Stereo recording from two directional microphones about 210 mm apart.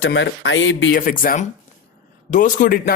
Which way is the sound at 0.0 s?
60° left (ahead or behind).